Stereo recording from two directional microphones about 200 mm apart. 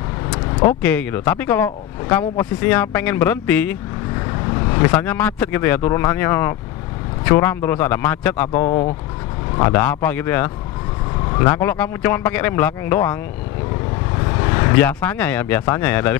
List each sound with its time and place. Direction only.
0.7 s speech: 10° left (ahead or behind)
4.6 s speech: 20° left (ahead or behind)
8.6 s speech: 30° left (ahead or behind)
9.6 s speech: 10° left (ahead or behind)